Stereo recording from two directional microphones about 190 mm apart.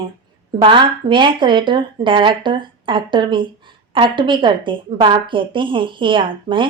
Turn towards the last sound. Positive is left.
turn(degrees=-25)  # may be behind; listen again after turning